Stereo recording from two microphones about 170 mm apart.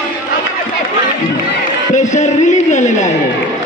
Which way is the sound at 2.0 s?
45° left (ahead or behind).